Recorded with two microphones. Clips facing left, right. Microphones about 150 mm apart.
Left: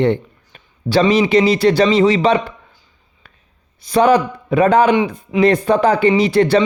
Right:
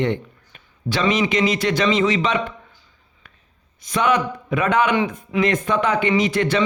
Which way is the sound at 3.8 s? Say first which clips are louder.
Left 7 dB; 30° left (ahead or behind).